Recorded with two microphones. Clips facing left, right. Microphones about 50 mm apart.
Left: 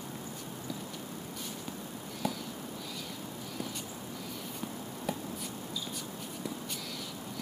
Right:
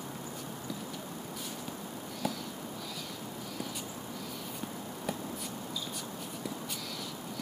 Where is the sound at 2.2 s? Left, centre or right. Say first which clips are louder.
Left 1 dB; centre.